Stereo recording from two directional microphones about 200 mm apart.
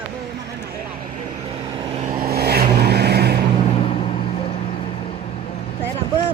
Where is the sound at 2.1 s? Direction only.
50° right (ahead or behind).